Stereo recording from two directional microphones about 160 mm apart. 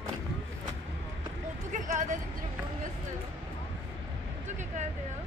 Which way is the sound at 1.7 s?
50° right (ahead or behind).